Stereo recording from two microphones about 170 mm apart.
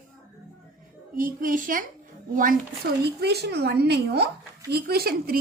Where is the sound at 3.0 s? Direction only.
75° right (ahead or behind).